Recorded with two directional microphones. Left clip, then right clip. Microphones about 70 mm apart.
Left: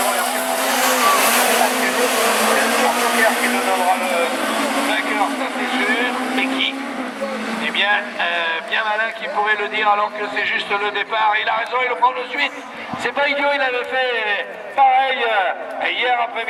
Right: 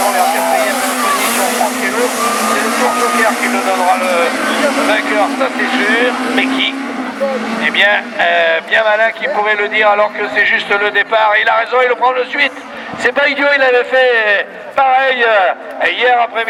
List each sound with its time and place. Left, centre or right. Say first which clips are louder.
0.0 s vehicle: right 7 dB; centre
1.4 s speech: right 2 dB; centre
7.6 s speech: right 7 dB; right